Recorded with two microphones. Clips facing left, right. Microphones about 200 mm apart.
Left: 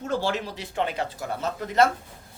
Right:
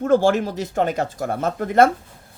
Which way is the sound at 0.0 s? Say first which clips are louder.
Right 10 dB; 50° right (ahead or behind).